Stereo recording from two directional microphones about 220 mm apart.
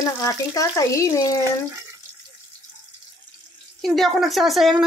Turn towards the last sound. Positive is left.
turn(degrees=0)  # may be behind; listen again after turning